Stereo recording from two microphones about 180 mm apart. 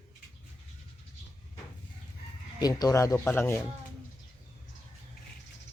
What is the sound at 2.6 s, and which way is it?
Speech, 20° left (ahead or behind).